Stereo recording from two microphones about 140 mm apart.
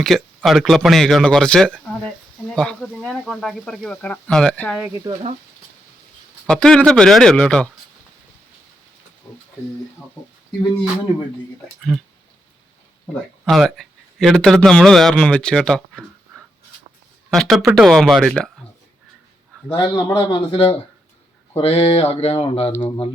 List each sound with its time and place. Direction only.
0.0 s speech: centre (ahead or behind)
5.1 s speech: 30° right (ahead or behind)
6.5 s speech: 5° left (ahead or behind)
13.4 s a man's voice: centre (ahead or behind)
19.7 s speech: 35° left (ahead or behind)
22.7 s speech: 20° left (ahead or behind)